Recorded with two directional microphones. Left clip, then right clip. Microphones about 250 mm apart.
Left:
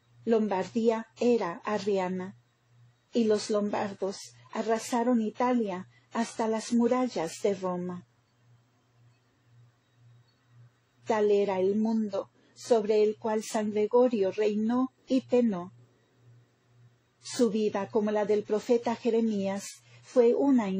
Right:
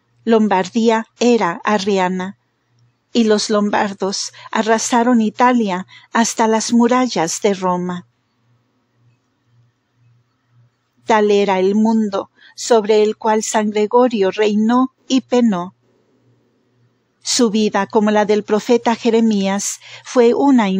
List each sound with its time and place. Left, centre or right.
0.2 s a woman's voice: right
11.1 s speech: right
17.2 s speech: right